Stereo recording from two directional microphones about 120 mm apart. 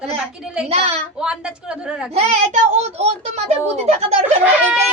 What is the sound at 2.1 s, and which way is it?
A child's voice, 65° right (ahead or behind).